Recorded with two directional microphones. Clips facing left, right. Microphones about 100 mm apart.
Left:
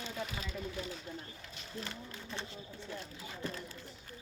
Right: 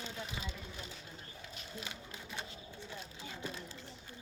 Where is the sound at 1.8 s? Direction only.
15° right (ahead or behind).